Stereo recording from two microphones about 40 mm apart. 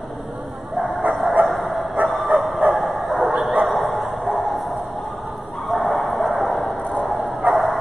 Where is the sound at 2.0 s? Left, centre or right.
Right.